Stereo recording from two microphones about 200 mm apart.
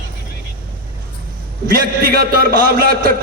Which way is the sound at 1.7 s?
50° right (ahead or behind).